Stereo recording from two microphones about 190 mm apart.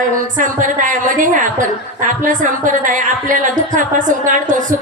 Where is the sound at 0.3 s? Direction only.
40° right (ahead or behind).